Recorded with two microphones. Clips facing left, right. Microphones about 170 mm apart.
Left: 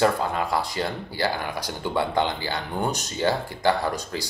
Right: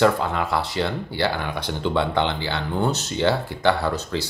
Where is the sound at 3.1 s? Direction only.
65° right (ahead or behind).